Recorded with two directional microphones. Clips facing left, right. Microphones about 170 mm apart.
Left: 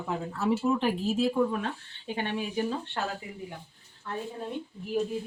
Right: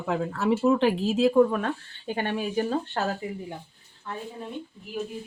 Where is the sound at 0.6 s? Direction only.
75° right (ahead or behind); by 3.0 s 45° right (ahead or behind).